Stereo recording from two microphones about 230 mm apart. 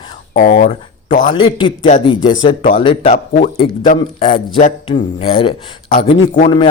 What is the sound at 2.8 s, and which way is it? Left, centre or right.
A man's voice, left.